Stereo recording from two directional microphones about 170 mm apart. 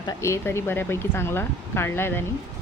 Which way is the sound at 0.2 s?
15° left (ahead or behind).